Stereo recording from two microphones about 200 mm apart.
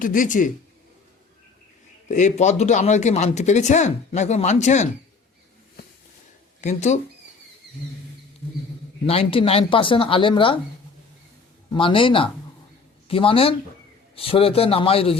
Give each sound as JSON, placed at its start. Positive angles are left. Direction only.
{"t": 0.0, "sound": "speech", "side_deg": 40}
{"t": 2.0, "sound": "speech", "side_deg": 35}
{"t": 6.6, "sound": "speech", "side_deg": 35}
{"t": 9.0, "sound": "speech", "side_deg": 30}
{"t": 11.7, "sound": "speech", "side_deg": 25}